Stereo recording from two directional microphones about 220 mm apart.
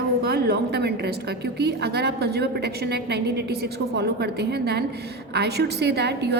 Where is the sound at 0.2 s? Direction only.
45° right (ahead or behind).